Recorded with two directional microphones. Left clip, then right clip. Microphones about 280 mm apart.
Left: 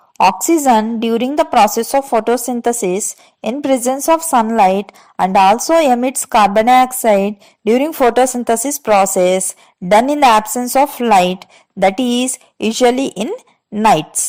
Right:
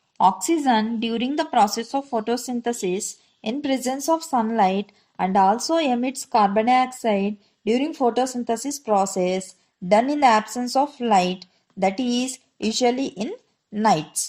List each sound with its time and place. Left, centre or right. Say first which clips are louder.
0.2 s a woman's voice: left 7 dB; left